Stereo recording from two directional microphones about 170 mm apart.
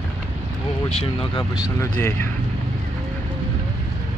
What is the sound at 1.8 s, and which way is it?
Speech, 15° left (ahead or behind).